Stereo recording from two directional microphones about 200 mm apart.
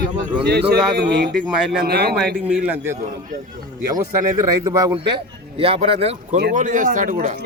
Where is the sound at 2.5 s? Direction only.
10° right (ahead or behind).